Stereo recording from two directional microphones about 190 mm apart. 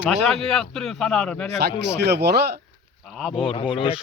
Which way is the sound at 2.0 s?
60° right (ahead or behind).